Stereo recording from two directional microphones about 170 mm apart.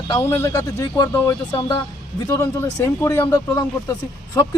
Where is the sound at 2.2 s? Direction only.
15° left (ahead or behind).